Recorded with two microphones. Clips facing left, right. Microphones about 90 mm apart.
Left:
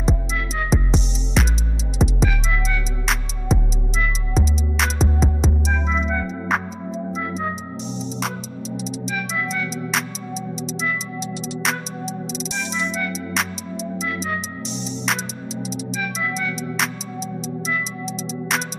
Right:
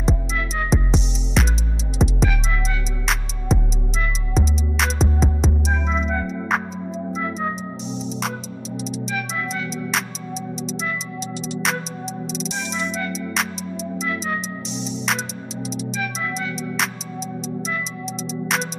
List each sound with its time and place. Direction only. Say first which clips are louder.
0.7 s music: left 1 dB; centre (ahead or behind)
3.5 s music: even; centre (ahead or behind)